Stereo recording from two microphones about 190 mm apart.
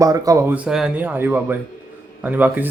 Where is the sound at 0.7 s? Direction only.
5° right (ahead or behind).